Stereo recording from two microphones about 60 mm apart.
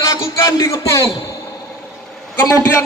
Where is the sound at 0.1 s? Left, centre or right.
Left.